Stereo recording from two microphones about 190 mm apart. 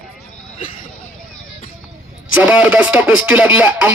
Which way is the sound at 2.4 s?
5° right (ahead or behind).